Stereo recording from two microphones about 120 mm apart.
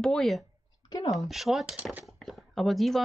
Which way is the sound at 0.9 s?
35° left (ahead or behind).